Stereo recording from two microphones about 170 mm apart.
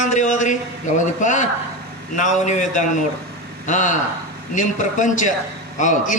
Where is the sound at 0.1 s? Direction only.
45° left (ahead or behind).